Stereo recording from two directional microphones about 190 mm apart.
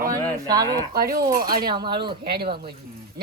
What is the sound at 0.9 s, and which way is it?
Speech, 55° right (ahead or behind).